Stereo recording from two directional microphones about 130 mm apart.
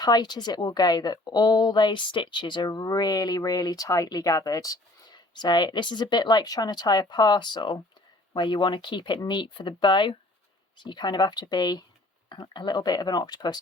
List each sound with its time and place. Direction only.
0.0 s speech: 30° left (ahead or behind)